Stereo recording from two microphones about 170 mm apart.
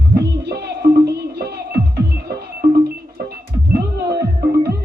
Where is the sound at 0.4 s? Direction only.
70° right (ahead or behind).